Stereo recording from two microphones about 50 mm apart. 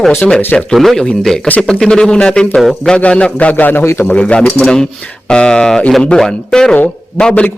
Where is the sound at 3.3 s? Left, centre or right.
Left.